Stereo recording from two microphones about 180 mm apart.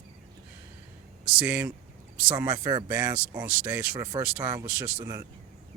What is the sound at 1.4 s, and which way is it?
Speech, 10° right (ahead or behind).